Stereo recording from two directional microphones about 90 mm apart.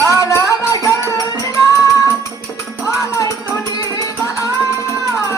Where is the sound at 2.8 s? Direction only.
35° left (ahead or behind).